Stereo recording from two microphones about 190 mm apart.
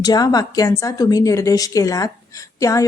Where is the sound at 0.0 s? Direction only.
20° left (ahead or behind).